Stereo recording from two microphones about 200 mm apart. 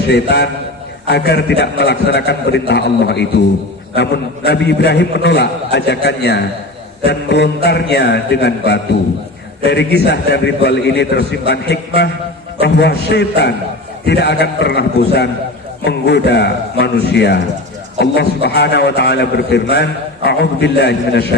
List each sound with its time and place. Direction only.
0.1 s a man's voice: 55° left (ahead or behind)